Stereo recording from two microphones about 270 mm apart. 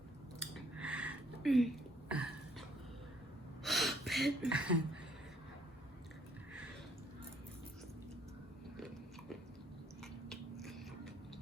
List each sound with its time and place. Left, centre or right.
0.8 s a sound: centre
3.6 s gasp: centre
10.0 s biting: centre